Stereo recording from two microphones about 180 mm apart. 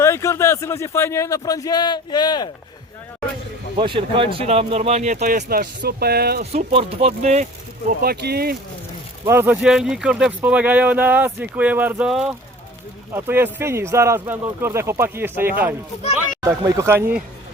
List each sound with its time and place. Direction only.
0.0 s speech: 15° left (ahead or behind)
3.8 s speech: 30° right (ahead or behind); by 6.4 s 60° right (ahead or behind)
6.4 s speech: 35° right (ahead or behind)
8.0 s speech: 60° right (ahead or behind)
9.2 s speech: 15° right (ahead or behind)
9.6 s speech: 5° right (ahead or behind)